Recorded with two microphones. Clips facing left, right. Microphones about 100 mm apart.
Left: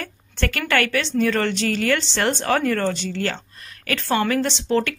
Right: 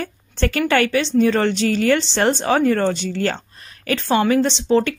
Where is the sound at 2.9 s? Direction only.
40° right (ahead or behind).